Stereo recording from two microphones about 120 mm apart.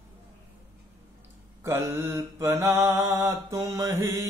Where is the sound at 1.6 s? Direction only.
20° right (ahead or behind).